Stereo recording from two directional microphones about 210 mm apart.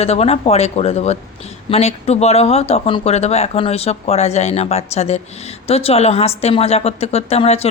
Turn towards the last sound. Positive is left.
turn(degrees=30)  # may be behind; listen again after turning